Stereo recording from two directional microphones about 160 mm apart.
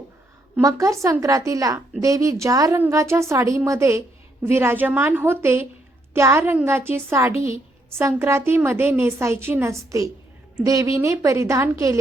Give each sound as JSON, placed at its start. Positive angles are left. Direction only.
{"t": 0.6, "sound": "a woman's voice", "side_deg": -20}